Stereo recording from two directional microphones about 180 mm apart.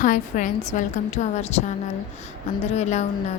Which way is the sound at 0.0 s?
45° left (ahead or behind).